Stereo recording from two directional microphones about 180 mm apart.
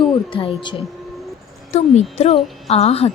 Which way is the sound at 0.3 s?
30° left (ahead or behind).